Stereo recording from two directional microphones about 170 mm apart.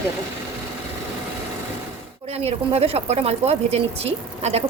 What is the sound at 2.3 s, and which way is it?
Speech, 35° right (ahead or behind).